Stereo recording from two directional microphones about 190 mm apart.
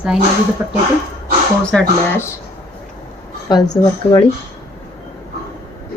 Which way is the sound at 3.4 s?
20° left (ahead or behind).